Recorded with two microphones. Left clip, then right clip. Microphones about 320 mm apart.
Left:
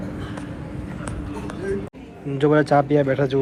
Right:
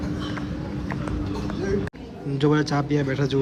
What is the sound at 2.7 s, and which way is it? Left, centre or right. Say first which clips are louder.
Speech: left 7 dB; centre.